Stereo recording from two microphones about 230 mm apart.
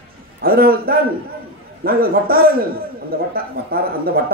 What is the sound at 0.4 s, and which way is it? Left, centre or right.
A man's voice, right.